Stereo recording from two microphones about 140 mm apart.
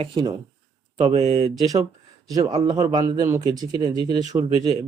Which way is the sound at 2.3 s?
25° right (ahead or behind).